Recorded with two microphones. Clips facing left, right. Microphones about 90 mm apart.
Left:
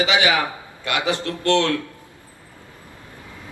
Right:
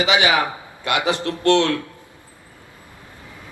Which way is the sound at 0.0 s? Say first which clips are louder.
Right 1 dB; 20° right (ahead or behind).